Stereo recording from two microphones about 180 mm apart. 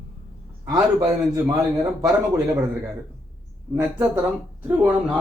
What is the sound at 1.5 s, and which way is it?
Speech, 20° right (ahead or behind).